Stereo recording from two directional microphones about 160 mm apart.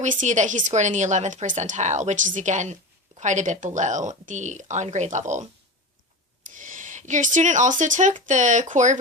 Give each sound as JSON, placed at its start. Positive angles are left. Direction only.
{"t": 0.0, "sound": "speech", "side_deg": -50}